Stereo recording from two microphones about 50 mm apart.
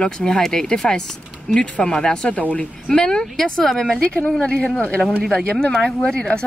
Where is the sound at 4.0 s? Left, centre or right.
Left.